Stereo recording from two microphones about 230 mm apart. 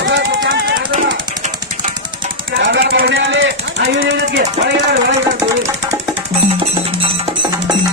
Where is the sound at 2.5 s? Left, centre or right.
Right.